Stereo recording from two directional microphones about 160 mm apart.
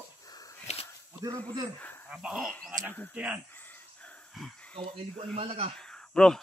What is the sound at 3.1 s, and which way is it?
Speech, 10° right (ahead or behind).